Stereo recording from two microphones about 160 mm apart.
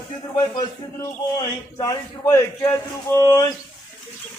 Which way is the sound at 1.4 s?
25° left (ahead or behind).